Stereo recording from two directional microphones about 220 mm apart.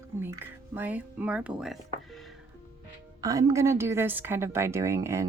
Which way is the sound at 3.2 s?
15° right (ahead or behind).